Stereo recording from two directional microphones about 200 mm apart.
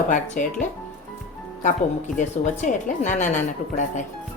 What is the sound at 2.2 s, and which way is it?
Speech, 40° left (ahead or behind).